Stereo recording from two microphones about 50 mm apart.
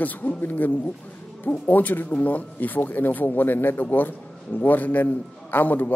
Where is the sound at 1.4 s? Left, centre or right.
Left.